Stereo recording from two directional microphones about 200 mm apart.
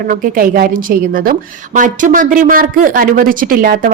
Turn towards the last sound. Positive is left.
turn(degrees=-45)  # may be behind; listen again after turning